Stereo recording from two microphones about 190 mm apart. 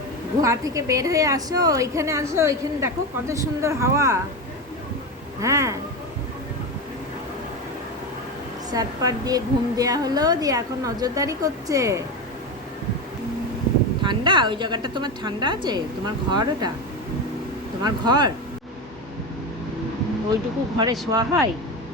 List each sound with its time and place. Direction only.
0.4 s a woman's voice: 15° right (ahead or behind)
5.4 s a woman's voice: 15° right (ahead or behind)
8.7 s a woman's voice: 20° right (ahead or behind)
14.0 s a woman's voice: 25° right (ahead or behind)
17.8 s a woman's voice: 20° right (ahead or behind)
21.1 s a woman's voice: 20° right (ahead or behind)